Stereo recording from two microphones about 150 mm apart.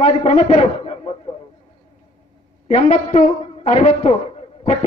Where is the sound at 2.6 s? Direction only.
45° left (ahead or behind).